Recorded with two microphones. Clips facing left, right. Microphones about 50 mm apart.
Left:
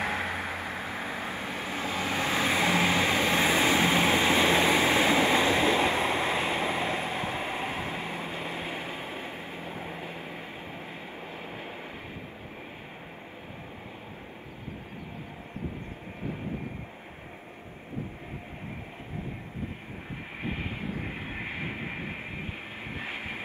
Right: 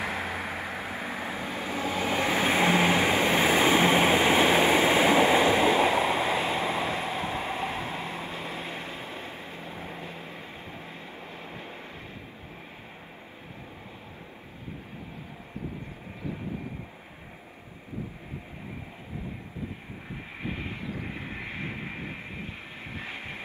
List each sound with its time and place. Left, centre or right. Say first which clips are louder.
0.0 s vehicle: left 1 dB; left
0.5 s vehicle: even; right
1.3 s vehicle: right 1 dB; left
2.0 s vehicle: right 2 dB; right
5.5 s vehicle: right 2 dB; centre
20.4 s vehicle: left 1 dB; left
23.0 s vehicle: left 3 dB; left